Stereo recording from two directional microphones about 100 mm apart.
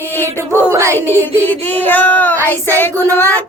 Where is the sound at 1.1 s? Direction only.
15° left (ahead or behind).